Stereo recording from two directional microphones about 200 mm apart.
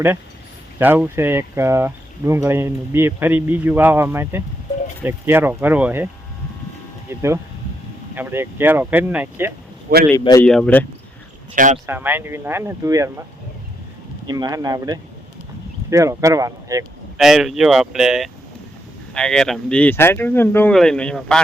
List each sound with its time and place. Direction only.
0.8 s speech: 10° right (ahead or behind)
7.1 s speech: 15° right (ahead or behind)
10.2 s speech: 20° left (ahead or behind)
10.4 s speech: 5° left (ahead or behind)
11.5 s speech: 40° right (ahead or behind)
11.9 s speech: 10° right (ahead or behind)
14.3 s speech: 20° right (ahead or behind)
17.2 s speech: centre (ahead or behind)